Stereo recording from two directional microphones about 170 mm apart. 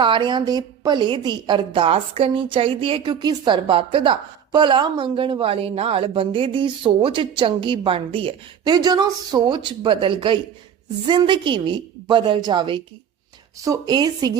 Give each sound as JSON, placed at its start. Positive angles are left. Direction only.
{"t": 0.0, "sound": "a woman's voice", "side_deg": -30}